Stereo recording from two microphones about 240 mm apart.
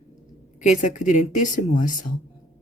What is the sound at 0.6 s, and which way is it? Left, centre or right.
Speech, left.